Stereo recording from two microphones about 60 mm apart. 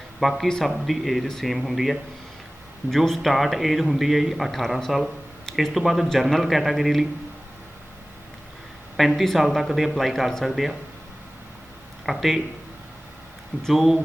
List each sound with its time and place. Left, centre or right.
0.2 s a man's voice: centre
9.0 s a man's voice: centre
12.0 s a man's voice: centre
13.6 s a man's voice: centre